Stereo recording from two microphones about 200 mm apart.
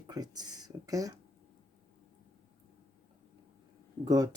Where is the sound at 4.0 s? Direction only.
20° right (ahead or behind).